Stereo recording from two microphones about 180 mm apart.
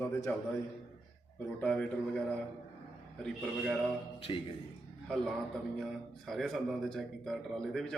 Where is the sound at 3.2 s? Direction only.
Centre (ahead or behind).